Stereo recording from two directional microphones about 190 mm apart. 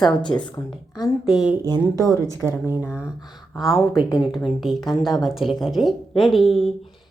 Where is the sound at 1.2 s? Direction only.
5° right (ahead or behind).